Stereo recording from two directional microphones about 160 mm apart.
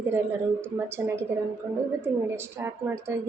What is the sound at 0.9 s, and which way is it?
Speech, 15° right (ahead or behind).